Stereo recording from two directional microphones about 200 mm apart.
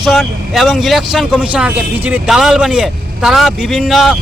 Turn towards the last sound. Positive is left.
turn(degrees=0)  # may be behind; listen again after turning